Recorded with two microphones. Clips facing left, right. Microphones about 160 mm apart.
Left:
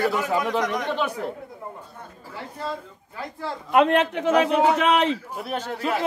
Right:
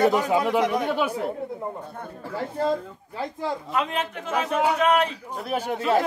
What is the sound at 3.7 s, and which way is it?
Speech, 65° left (ahead or behind).